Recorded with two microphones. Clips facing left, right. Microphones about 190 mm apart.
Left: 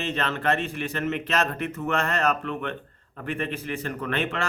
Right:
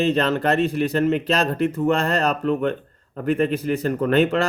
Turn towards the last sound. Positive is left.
turn(degrees=-40)  # may be behind; listen again after turning